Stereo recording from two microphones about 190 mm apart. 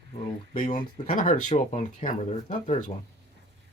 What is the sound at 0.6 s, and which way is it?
Speech, 40° left (ahead or behind).